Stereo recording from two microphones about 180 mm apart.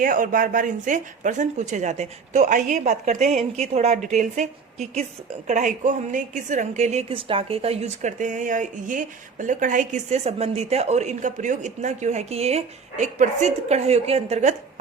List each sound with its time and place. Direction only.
0.0 s a woman's voice: 50° right (ahead or behind)